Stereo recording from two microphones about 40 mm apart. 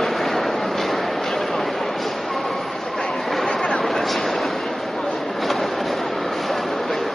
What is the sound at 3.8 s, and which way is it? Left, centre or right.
Vehicle, centre.